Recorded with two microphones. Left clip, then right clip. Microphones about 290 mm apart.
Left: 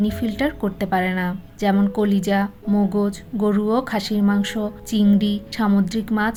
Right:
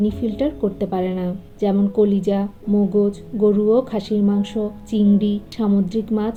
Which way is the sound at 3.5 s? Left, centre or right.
Left.